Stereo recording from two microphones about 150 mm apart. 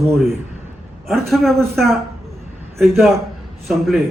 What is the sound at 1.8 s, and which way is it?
Speech, centre (ahead or behind).